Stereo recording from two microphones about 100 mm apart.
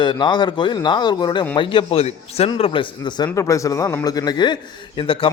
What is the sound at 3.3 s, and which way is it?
Speech, 30° left (ahead or behind).